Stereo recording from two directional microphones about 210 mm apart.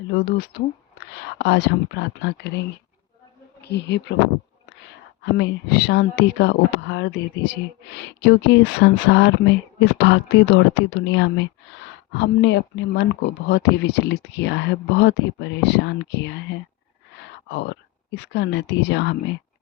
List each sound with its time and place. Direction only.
0.1 s speech: 45° left (ahead or behind)
3.6 s speech: 55° left (ahead or behind)
5.2 s speech: 55° left (ahead or behind)
17.5 s speech: 55° left (ahead or behind)